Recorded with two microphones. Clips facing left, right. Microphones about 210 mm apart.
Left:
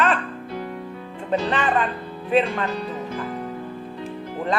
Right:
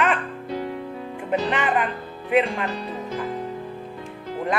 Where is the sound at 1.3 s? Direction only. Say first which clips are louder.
Left 1 dB; 15° right (ahead or behind).